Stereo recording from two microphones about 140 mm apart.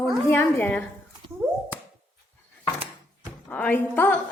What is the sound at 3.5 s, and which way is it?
Speech, 10° left (ahead or behind).